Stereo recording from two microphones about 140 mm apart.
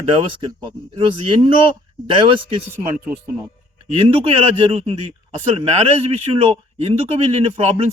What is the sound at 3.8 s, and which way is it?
A man's voice, 50° right (ahead or behind).